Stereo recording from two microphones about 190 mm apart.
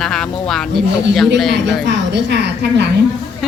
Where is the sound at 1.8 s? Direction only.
65° right (ahead or behind).